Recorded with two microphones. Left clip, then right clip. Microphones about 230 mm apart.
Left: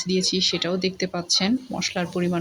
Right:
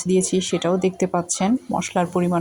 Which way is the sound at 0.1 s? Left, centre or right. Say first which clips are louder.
Right 2 dB; centre.